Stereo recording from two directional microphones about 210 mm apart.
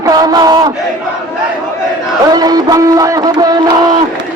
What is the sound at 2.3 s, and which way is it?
A man's voice, 20° right (ahead or behind).